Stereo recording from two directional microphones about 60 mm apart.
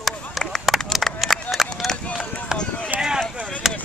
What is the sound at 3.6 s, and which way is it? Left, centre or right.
Chop, centre.